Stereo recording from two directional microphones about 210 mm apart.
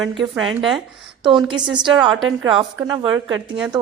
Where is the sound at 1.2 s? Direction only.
25° right (ahead or behind).